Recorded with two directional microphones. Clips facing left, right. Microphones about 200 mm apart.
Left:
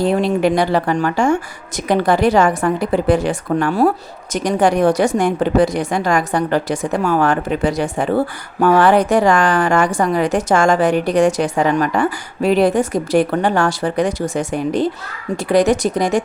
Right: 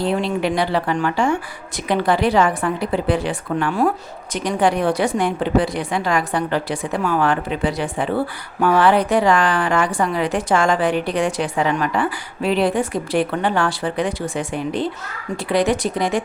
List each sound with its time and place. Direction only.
0.0 s speech: 45° left (ahead or behind)